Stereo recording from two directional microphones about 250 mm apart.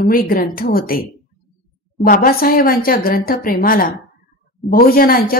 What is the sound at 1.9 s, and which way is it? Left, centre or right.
A woman's voice, left.